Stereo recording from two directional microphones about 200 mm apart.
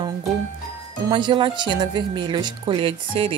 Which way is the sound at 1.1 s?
25° right (ahead or behind).